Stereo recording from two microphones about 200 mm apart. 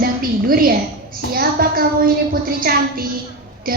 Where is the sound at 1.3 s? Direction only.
45° right (ahead or behind).